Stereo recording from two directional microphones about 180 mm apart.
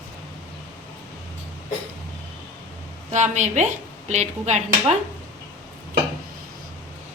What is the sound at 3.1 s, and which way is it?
Speech, 40° right (ahead or behind).